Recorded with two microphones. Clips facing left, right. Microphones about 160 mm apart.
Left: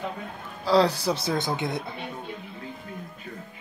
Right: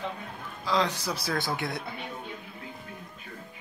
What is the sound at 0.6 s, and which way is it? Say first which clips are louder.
Speech: left 7 dB; 35° left (ahead or behind).